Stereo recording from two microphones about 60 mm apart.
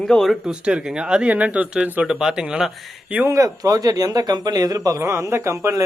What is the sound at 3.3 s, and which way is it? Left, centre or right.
Speech, right.